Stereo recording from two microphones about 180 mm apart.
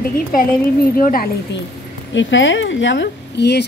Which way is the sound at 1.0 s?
50° left (ahead or behind).